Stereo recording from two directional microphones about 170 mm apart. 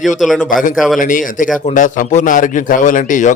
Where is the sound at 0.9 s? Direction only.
50° left (ahead or behind).